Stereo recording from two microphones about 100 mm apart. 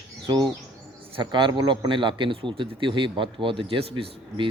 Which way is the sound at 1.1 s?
50° right (ahead or behind).